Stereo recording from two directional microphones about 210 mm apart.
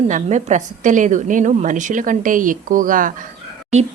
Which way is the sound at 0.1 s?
35° right (ahead or behind).